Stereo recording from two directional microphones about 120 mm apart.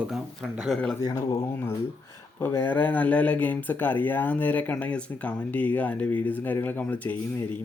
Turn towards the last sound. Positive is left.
turn(degrees=15)  # may be behind; listen again after turning